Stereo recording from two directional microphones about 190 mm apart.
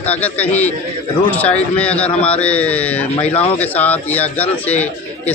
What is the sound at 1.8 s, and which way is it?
A man's voice, 5° left (ahead or behind).